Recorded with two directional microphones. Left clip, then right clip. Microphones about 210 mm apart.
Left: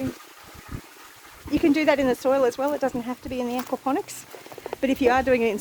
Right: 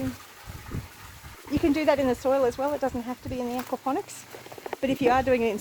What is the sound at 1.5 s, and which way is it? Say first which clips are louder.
Speech: left 3 dB; 10° left (ahead or behind).